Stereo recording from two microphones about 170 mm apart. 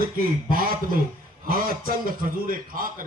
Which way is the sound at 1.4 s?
60° right (ahead or behind).